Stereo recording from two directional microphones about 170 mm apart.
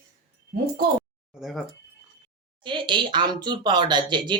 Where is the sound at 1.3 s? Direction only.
Centre (ahead or behind).